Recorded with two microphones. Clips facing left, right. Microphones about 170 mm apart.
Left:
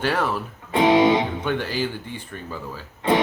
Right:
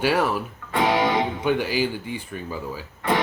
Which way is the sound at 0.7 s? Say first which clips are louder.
Left 5 dB; 20° left (ahead or behind).